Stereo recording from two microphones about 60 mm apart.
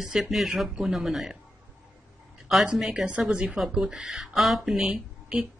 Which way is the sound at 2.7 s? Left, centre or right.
Centre.